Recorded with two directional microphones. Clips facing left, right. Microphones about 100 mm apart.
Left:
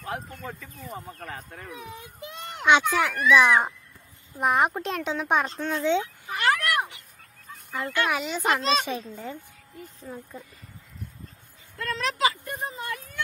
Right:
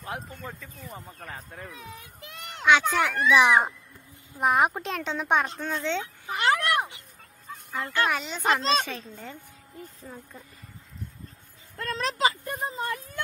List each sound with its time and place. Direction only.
0.1 s speech: centre (ahead or behind)
1.7 s speech: 20° left (ahead or behind)
2.9 s speech: centre (ahead or behind)
5.7 s speech: 10° left (ahead or behind)
6.2 s a sound: 20° right (ahead or behind)
7.5 s a sound: centre (ahead or behind)
8.1 s speech: 5° left (ahead or behind)
11.7 s speech: 40° right (ahead or behind)